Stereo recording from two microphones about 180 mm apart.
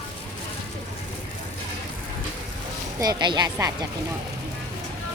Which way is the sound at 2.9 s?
25° right (ahead or behind).